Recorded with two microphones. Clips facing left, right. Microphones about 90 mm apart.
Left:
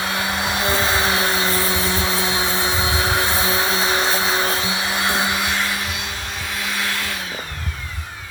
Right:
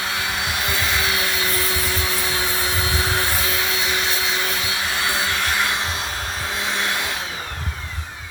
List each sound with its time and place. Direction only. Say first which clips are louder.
0.7 s aircraft: left 4 dB; 30° left (ahead or behind)
2.0 s vacuum cleaner: left 3 dB; 20° left (ahead or behind)